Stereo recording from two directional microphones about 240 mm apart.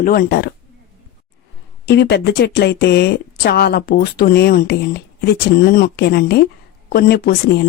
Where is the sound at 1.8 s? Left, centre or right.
Left.